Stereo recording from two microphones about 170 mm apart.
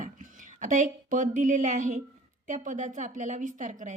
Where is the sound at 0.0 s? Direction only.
50° right (ahead or behind).